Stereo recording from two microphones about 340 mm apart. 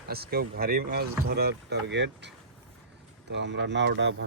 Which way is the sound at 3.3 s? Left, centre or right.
Right.